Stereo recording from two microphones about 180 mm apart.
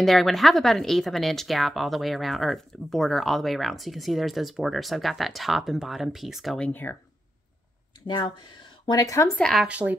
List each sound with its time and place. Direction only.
0.0 s speech: centre (ahead or behind)
8.1 s speech: 25° left (ahead or behind)
9.4 s speech: centre (ahead or behind)